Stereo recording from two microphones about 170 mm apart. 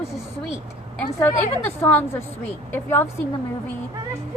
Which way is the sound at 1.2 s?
15° left (ahead or behind).